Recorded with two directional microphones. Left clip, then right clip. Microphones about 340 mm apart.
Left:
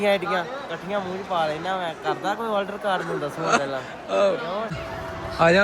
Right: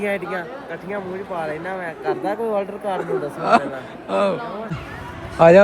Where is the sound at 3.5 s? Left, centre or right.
Centre.